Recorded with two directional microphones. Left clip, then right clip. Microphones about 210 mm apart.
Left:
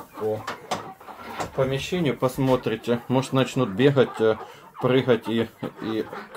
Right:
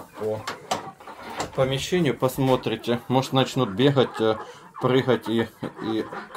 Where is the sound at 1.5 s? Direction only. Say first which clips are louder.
Right 2 dB; 30° right (ahead or behind).